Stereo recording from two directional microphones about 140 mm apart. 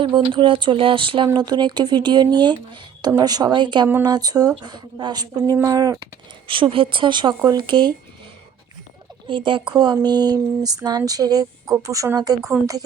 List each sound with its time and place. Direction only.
0.0 s speech: 35° right (ahead or behind)
6.5 s speech: 40° right (ahead or behind)
9.3 s speech: 35° right (ahead or behind)